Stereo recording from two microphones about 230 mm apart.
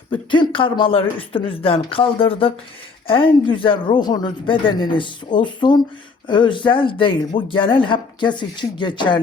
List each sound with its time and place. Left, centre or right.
0.1 s speech: left